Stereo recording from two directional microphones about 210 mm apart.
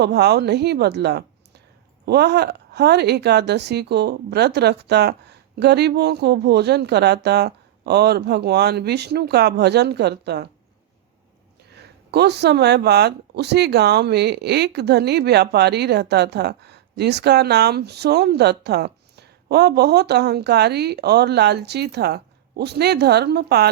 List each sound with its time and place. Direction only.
0.0 s a woman's voice: 50° right (ahead or behind)
11.7 s speech: 50° right (ahead or behind)